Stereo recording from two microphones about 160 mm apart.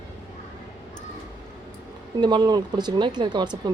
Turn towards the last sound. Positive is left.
turn(degrees=-30)  # may be behind; listen again after turning